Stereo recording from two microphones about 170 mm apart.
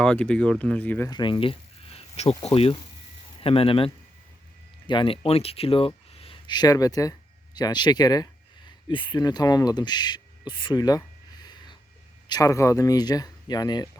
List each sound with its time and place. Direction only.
0.0 s speech: 5° left (ahead or behind)
1.1 s a sound: 25° left (ahead or behind)
2.4 s speech: 35° left (ahead or behind)